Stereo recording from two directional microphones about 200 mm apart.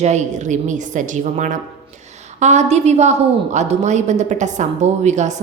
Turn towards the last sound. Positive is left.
turn(degrees=-35)  # may be behind; listen again after turning